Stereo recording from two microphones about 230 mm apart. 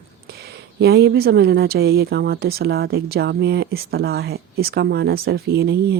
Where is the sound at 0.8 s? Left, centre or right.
Right.